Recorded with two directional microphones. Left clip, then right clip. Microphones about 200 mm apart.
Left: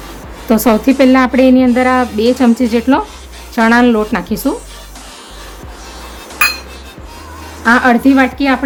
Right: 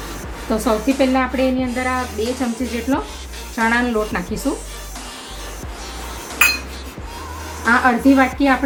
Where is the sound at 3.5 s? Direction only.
50° left (ahead or behind).